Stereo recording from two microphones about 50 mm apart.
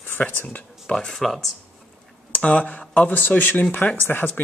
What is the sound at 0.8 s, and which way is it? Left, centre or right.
Speech, centre.